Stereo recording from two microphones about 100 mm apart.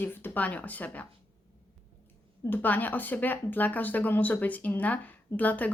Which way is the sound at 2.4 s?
20° left (ahead or behind).